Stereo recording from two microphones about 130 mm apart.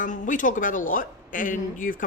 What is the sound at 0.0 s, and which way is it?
Speech, 85° left.